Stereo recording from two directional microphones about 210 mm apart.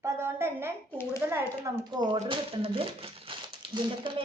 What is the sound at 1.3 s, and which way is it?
A woman's voice, 10° right (ahead or behind).